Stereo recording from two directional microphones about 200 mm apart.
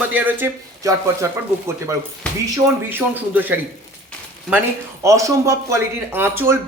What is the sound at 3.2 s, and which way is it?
Speech, 10° right (ahead or behind).